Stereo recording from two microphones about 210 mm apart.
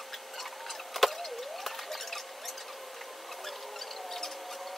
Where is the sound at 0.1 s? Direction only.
Centre (ahead or behind).